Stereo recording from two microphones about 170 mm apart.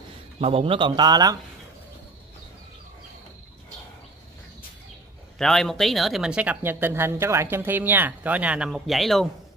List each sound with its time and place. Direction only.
0.4 s speech: 35° right (ahead or behind)
5.4 s speech: centre (ahead or behind)